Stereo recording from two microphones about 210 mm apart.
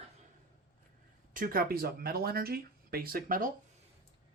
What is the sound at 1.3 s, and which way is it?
Speech, 45° right (ahead or behind).